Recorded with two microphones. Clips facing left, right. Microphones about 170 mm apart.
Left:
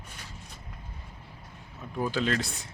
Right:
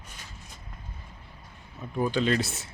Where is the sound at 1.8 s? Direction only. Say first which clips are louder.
Right 3 dB; centre (ahead or behind).